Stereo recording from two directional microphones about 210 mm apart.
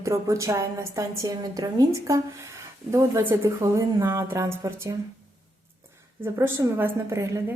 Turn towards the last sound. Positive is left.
turn(degrees=-15)  # may be behind; listen again after turning